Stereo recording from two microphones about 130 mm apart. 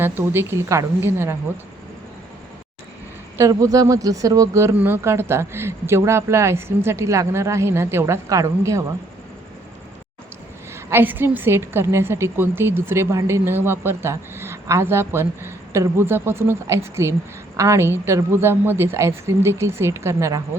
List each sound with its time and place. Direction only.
0.0 s a woman's voice: 20° right (ahead or behind)
3.3 s a woman's voice: 25° right (ahead or behind)
10.8 s a woman's voice: 15° right (ahead or behind)